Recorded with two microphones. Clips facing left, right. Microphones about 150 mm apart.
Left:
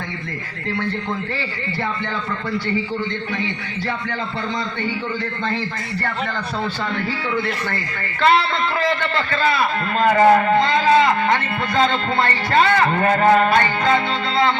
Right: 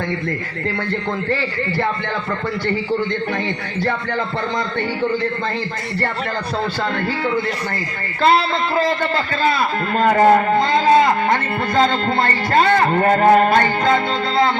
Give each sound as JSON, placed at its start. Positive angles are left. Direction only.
{"t": 8.2, "sound": "a man's voice", "side_deg": -35}